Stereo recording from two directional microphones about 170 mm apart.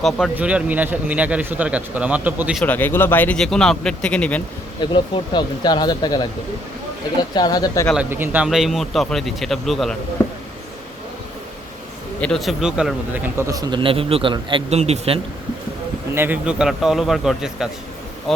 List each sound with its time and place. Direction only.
0.3 s speech: 10° right (ahead or behind)
2.6 s speech: 10° left (ahead or behind)
4.8 s speech: 25° left (ahead or behind)
7.9 s a man's voice: 10° right (ahead or behind)
12.2 s speech: centre (ahead or behind); by 15.2 s 35° right (ahead or behind)
16.1 s a man's voice: 10° right (ahead or behind)